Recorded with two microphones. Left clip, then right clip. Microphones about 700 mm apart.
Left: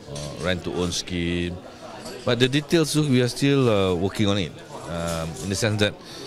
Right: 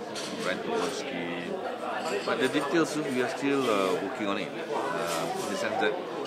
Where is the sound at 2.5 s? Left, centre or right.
Left.